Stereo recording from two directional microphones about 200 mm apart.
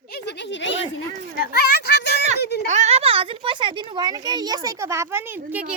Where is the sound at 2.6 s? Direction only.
35° right (ahead or behind).